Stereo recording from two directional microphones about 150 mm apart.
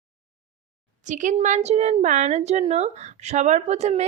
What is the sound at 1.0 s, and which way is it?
A woman's voice, 55° right (ahead or behind).